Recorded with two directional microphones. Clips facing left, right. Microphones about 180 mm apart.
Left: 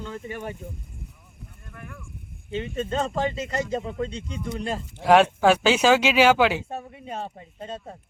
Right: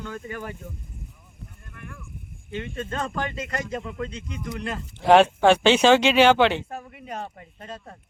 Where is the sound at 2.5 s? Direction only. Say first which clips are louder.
Left 4 dB; 25° left (ahead or behind).